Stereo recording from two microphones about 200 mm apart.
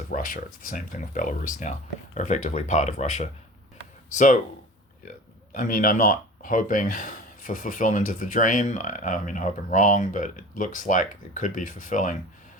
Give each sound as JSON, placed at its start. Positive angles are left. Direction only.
{"t": 0.1, "sound": "speech", "side_deg": 45}
{"t": 5.5, "sound": "speech", "side_deg": 45}